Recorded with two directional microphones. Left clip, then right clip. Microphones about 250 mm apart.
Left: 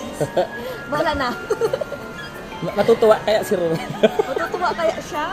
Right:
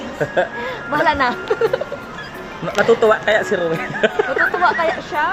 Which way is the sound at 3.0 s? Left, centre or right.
Left.